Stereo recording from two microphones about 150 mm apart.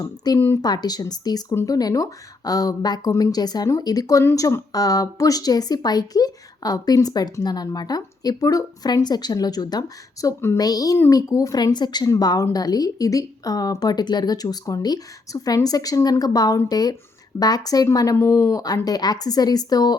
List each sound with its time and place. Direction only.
0.0 s speech: 15° left (ahead or behind)
0.6 s speech: 25° left (ahead or behind)